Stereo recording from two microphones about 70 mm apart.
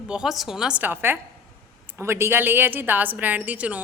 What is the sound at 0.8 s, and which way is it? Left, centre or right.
A woman's voice, right.